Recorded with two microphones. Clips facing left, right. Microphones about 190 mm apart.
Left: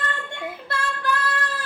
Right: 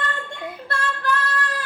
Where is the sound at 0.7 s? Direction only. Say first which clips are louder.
Right 2 dB; 10° left (ahead or behind).